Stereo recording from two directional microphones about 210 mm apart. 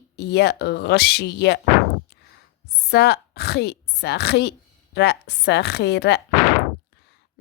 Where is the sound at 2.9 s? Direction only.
50° left (ahead or behind).